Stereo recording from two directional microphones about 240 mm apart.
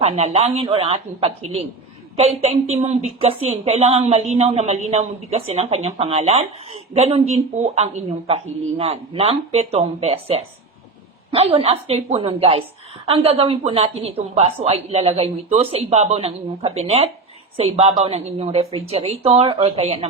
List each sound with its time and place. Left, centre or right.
0.0 s a woman's voice: right